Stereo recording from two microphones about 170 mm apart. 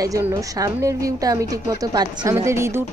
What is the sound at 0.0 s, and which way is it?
A woman's voice, 15° right (ahead or behind).